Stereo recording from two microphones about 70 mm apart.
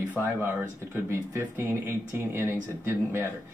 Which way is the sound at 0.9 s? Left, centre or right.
Right.